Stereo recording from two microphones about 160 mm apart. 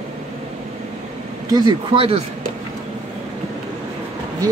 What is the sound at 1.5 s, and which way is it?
Speech, 30° right (ahead or behind).